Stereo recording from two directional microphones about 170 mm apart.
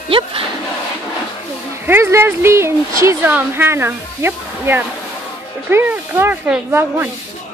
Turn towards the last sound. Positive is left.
turn(degrees=-10)  # may be behind; listen again after turning